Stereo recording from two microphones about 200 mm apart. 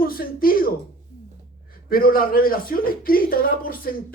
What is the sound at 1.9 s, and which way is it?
A man's voice, 45° left (ahead or behind).